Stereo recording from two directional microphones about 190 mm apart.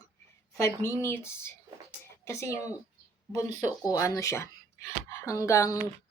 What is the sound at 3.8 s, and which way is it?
A woman's voice, 15° left (ahead or behind).